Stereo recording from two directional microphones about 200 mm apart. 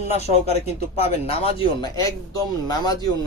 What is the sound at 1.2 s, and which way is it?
Speech, 30° left (ahead or behind).